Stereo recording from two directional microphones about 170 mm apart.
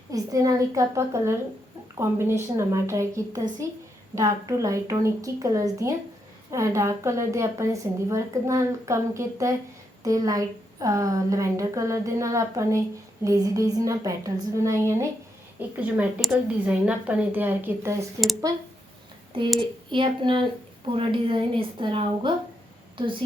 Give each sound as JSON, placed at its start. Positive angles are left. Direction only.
{"t": 0.1, "sound": "a woman's voice", "side_deg": -20}
{"t": 19.3, "sound": "a woman's voice", "side_deg": -30}